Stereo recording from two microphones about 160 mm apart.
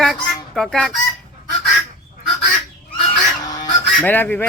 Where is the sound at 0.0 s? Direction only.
Centre (ahead or behind).